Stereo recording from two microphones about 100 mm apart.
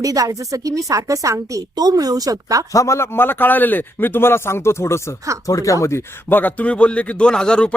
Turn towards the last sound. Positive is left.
turn(degrees=10)  # may be behind; listen again after turning